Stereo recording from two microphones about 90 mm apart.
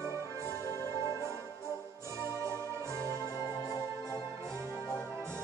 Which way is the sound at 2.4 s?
30° right (ahead or behind).